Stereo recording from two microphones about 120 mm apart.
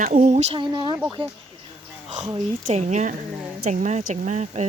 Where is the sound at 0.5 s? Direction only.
40° right (ahead or behind).